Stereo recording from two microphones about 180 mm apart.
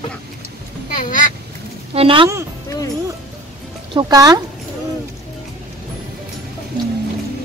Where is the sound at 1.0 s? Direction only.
50° left (ahead or behind).